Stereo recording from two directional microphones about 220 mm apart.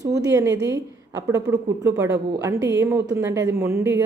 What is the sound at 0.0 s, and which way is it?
A woman's voice, 15° right (ahead or behind).